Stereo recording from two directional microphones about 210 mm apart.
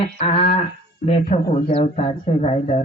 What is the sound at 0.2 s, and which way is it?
Speech, 30° left (ahead or behind).